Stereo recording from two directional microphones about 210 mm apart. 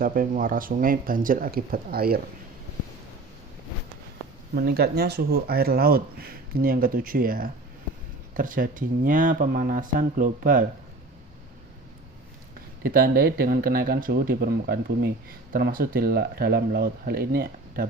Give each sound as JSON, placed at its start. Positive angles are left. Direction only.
{"t": 0.0, "sound": "speech", "side_deg": -40}
{"t": 4.5, "sound": "speech", "side_deg": -50}
{"t": 12.8, "sound": "speech", "side_deg": -45}